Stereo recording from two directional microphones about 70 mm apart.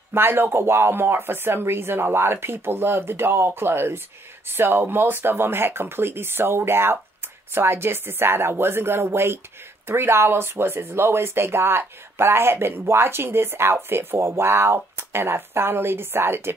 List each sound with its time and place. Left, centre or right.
0.1 s speech: right